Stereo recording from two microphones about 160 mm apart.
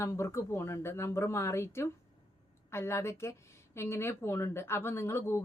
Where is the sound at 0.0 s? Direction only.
20° left (ahead or behind).